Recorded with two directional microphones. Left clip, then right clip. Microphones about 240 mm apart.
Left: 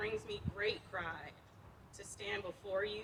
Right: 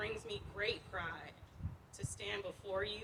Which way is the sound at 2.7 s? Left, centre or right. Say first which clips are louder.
Left 2 dB; right.